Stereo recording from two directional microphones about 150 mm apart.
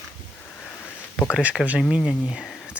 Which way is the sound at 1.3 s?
5° right (ahead or behind).